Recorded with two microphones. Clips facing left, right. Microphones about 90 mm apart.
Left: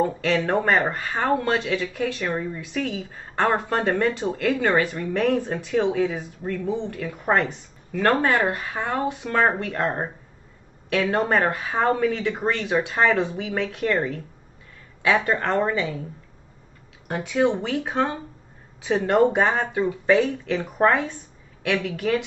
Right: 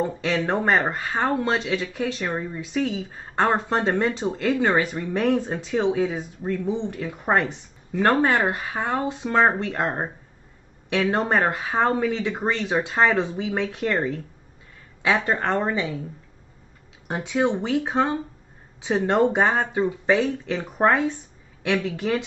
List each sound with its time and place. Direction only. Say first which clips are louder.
0.0 s speech: left 2 dB; 15° right (ahead or behind)
17.1 s speech: left 1 dB; 20° right (ahead or behind)
21.8 s speech: left 1 dB; 25° right (ahead or behind)